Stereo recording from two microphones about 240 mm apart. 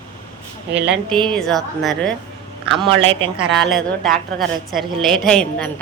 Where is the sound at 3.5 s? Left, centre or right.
Centre.